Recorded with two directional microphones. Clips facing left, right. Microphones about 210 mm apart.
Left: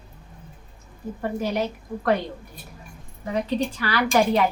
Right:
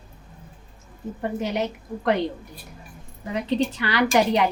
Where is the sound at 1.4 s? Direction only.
20° right (ahead or behind).